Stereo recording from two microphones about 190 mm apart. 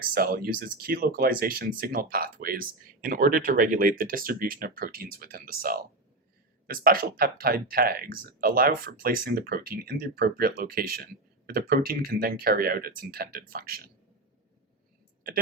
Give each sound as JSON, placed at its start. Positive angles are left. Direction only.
{"t": 0.1, "sound": "speech", "side_deg": -50}